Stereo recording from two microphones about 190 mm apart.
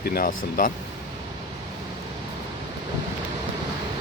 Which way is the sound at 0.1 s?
45° left (ahead or behind).